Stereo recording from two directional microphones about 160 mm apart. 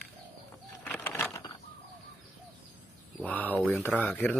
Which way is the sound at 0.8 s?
10° left (ahead or behind).